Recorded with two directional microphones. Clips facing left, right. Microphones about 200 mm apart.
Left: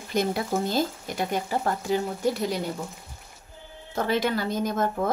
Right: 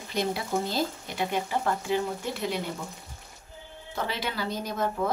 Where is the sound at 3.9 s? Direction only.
45° left (ahead or behind).